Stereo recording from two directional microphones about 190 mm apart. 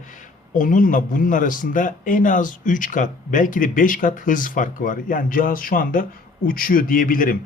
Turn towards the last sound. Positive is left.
turn(degrees=45)  # may be behind; listen again after turning